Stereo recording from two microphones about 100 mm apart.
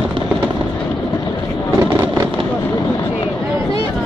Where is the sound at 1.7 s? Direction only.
35° right (ahead or behind).